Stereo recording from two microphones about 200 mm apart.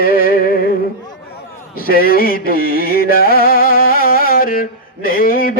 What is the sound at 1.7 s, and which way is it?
Music, 50° left (ahead or behind).